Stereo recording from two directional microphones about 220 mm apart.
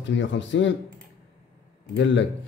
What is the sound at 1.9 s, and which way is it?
Speech, 55° left (ahead or behind).